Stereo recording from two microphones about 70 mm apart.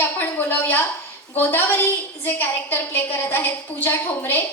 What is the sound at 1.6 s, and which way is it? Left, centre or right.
A woman's voice, left.